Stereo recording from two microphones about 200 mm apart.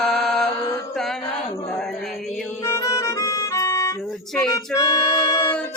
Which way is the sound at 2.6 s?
15° left (ahead or behind).